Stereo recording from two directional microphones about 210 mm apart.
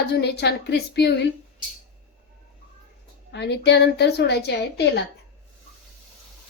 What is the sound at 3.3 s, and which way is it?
Speech, 55° left (ahead or behind).